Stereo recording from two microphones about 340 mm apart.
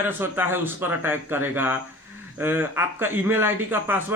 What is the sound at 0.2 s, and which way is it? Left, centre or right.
Speech, centre.